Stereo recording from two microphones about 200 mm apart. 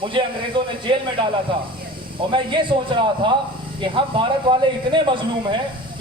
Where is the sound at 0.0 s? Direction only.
25° right (ahead or behind).